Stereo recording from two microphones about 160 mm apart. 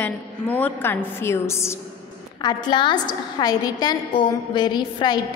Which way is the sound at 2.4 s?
25° left (ahead or behind).